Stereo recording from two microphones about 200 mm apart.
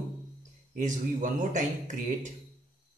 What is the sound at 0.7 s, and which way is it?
A man's voice, 40° right (ahead or behind).